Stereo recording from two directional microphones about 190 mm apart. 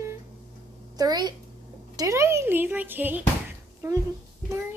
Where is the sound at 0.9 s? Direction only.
20° right (ahead or behind).